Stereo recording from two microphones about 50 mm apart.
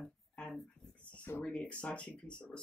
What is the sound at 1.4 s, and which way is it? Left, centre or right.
Speech, left.